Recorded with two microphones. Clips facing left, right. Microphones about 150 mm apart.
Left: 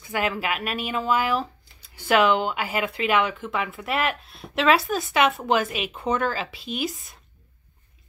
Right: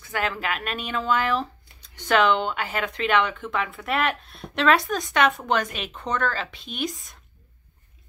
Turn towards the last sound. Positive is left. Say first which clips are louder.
# left 1 dB
turn(degrees=5)  # may be behind; listen again after turning